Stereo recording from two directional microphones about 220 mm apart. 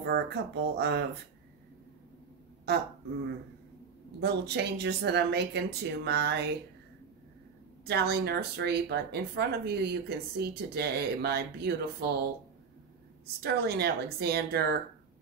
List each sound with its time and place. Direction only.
0.0 s speech: 50° right (ahead or behind)
2.7 s speech: 50° right (ahead or behind)
4.2 s speech: 50° right (ahead or behind)
7.8 s speech: 45° right (ahead or behind)
13.4 s speech: 45° right (ahead or behind)